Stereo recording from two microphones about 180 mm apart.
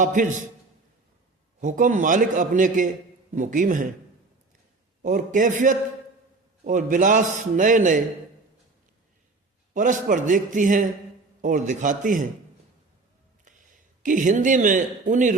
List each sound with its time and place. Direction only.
0.0 s speech: 45° right (ahead or behind)
1.6 s speech: 45° right (ahead or behind)
5.0 s speech: 45° right (ahead or behind)
9.7 s speech: 45° right (ahead or behind)
14.0 s speech: 45° right (ahead or behind)